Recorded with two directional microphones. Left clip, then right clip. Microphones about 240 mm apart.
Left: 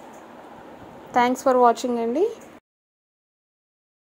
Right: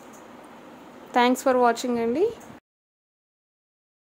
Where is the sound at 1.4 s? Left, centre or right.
Centre.